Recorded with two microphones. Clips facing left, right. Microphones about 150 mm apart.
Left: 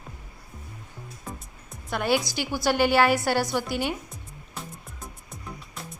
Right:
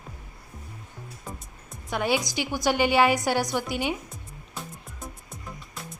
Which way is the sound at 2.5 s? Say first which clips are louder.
Left 1 dB; 15° right (ahead or behind).